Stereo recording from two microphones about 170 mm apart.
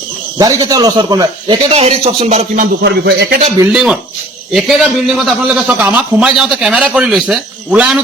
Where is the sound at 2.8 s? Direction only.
80° right.